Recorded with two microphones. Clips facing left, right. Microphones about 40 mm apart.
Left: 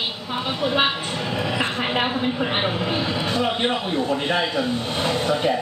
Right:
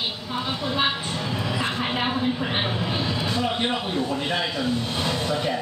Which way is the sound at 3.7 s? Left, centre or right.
Centre.